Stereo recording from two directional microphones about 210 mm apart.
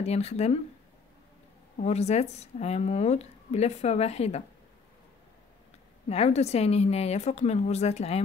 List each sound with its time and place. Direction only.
0.0 s speech: 30° left (ahead or behind)
1.8 s speech: 30° left (ahead or behind)
6.0 s speech: 30° left (ahead or behind)